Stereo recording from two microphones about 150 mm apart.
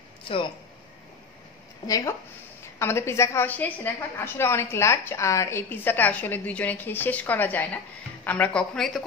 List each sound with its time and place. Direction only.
1.9 s a woman's voice: 25° left (ahead or behind); by 9.0 s 5° left (ahead or behind)